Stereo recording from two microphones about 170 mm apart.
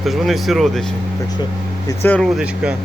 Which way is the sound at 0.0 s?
Centre (ahead or behind).